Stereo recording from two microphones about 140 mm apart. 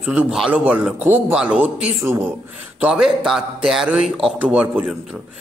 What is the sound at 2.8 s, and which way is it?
A man's voice, 5° right (ahead or behind).